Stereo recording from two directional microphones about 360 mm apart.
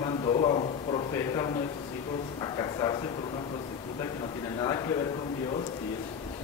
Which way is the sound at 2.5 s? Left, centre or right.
Centre.